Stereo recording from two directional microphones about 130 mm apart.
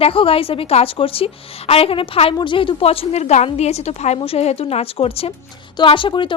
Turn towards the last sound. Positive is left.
turn(degrees=40)  # may be behind; listen again after turning